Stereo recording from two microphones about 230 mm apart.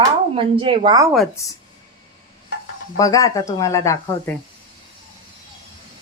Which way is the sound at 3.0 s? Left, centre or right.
Centre.